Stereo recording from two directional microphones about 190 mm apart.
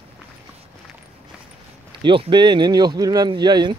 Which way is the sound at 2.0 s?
25° right (ahead or behind).